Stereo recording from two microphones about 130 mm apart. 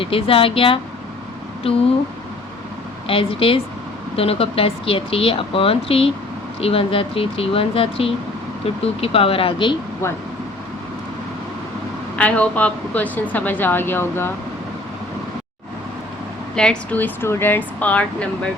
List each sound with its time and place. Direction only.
0.0 s speech: 45° left (ahead or behind)
3.1 s speech: 45° left (ahead or behind)
12.1 s a woman's voice: 10° left (ahead or behind)
16.6 s a woman's voice: 10° left (ahead or behind)